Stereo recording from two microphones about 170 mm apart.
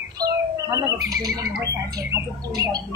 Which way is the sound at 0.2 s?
20° right (ahead or behind).